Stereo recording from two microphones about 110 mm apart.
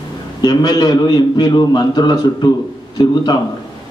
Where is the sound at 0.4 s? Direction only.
40° left (ahead or behind).